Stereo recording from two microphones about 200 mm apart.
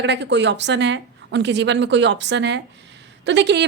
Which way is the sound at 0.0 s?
60° right (ahead or behind).